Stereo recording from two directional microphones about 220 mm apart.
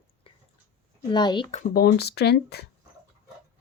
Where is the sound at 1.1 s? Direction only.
20° left (ahead or behind).